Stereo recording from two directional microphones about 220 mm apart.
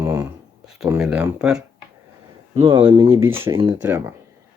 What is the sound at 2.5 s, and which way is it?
Speech, 20° right (ahead or behind).